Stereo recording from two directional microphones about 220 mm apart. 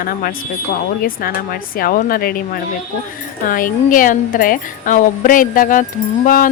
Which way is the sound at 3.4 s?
40° left (ahead or behind).